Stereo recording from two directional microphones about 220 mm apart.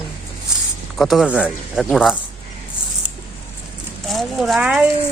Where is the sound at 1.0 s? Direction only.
Centre (ahead or behind).